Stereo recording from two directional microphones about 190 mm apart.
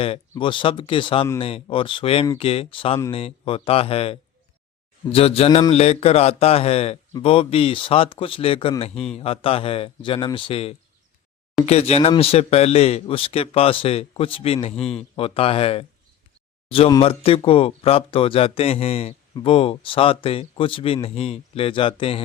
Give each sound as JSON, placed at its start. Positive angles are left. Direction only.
{"t": 0.0, "sound": "speech", "side_deg": 30}